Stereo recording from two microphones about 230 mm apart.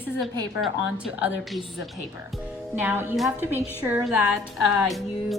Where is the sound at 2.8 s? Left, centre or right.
Centre.